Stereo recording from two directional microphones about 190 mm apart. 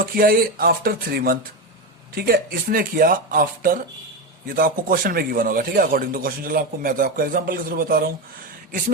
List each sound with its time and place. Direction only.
0.0 s a man's voice: 50° right (ahead or behind)